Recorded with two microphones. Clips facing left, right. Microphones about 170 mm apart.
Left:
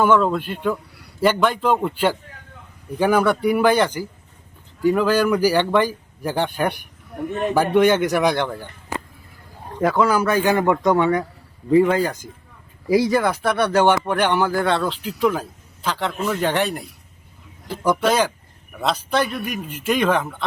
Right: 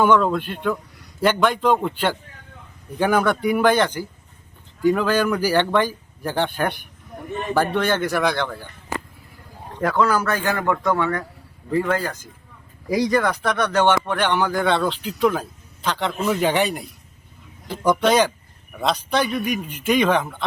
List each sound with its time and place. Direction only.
0.0 s speech: centre (ahead or behind); by 8.5 s 20° left (ahead or behind)
9.8 s speech: 10° left (ahead or behind)